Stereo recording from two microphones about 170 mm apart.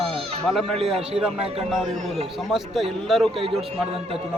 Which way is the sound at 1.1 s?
5° right (ahead or behind).